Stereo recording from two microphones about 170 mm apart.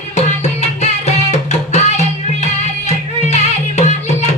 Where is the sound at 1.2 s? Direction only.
40° left (ahead or behind).